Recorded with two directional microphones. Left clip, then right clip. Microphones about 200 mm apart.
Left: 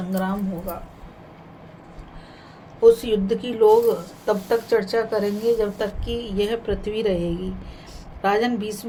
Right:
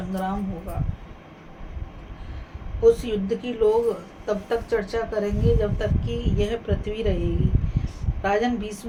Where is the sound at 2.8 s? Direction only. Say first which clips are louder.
Left 3 dB; 30° left (ahead or behind).